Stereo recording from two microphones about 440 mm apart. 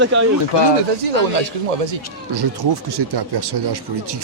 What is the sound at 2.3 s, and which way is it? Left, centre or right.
Speech, right.